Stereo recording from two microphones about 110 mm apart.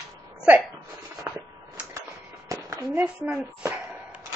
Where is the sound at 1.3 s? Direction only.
20° right (ahead or behind).